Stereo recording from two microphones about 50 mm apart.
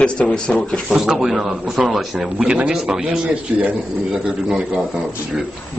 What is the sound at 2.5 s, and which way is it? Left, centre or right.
Speech, right.